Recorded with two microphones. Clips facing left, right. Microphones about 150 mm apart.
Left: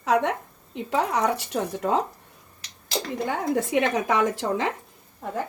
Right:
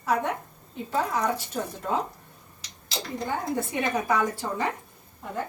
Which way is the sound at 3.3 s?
85° left.